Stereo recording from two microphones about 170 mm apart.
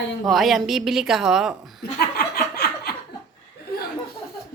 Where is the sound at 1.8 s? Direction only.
65° left (ahead or behind).